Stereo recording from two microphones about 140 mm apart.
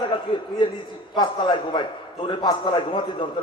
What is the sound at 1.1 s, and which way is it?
A man's voice, 35° left (ahead or behind).